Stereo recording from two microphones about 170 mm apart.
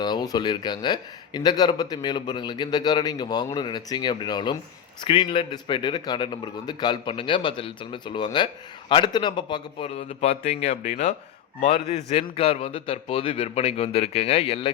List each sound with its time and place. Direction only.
0.0 s a man's voice: 25° left (ahead or behind)